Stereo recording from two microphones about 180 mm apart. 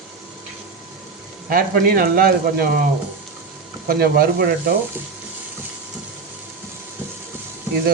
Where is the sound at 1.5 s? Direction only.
55° right (ahead or behind).